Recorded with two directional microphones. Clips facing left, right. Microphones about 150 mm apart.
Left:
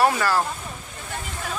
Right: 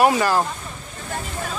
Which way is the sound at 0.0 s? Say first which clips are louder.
Right 3 dB; 15° right (ahead or behind).